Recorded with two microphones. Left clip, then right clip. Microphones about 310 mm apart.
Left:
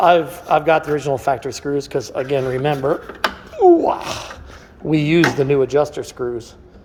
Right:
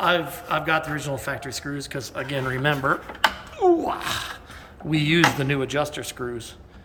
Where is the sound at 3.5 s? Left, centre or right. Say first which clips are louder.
Left 12 dB; centre.